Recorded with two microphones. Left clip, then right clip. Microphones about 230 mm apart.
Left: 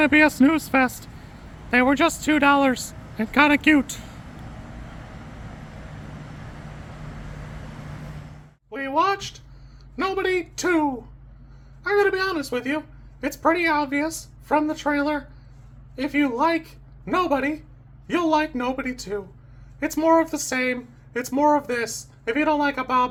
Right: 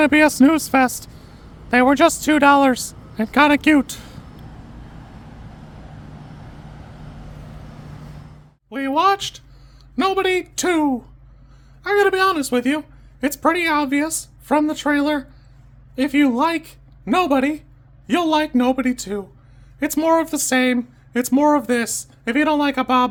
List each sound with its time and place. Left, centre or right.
0.0 s speech: right
8.7 s a sound: right
9.9 s speech: right